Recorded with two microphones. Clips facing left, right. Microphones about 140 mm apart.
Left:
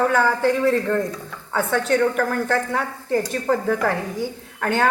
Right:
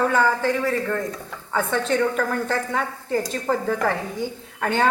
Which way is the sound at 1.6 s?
20° right (ahead or behind).